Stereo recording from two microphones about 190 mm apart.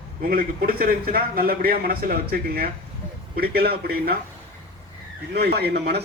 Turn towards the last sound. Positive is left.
turn(degrees=-60)  # may be behind; listen again after turning